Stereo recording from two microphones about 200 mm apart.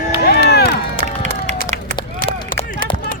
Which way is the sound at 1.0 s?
35° right (ahead or behind).